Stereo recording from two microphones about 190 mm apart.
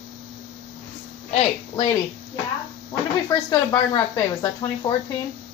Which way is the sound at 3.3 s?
20° left (ahead or behind).